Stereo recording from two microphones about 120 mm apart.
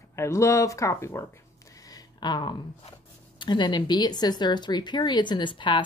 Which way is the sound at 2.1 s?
35° left (ahead or behind).